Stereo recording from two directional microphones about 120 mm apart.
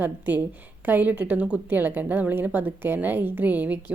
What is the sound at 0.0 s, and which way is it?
A woman's voice, 15° right (ahead or behind).